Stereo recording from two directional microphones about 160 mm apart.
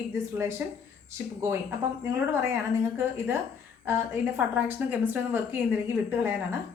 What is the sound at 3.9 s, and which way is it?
A woman's voice, 15° right (ahead or behind).